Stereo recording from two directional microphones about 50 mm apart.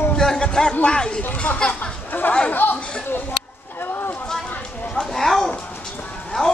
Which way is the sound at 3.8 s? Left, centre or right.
Left.